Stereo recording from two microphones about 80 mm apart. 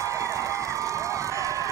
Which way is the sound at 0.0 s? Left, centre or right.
Right.